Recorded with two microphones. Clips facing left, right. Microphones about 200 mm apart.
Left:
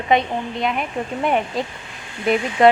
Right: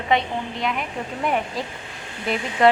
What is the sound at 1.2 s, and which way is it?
Speech, 25° left (ahead or behind).